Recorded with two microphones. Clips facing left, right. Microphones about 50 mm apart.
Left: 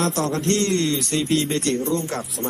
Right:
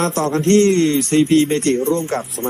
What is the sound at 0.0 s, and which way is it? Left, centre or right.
Speech, right.